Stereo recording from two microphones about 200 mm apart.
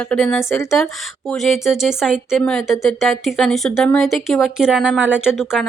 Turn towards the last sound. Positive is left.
turn(degrees=-5)  # may be behind; listen again after turning